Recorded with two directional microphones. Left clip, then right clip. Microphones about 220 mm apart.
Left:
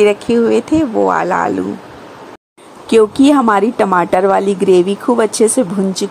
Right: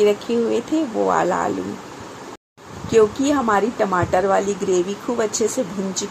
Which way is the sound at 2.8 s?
45° left (ahead or behind).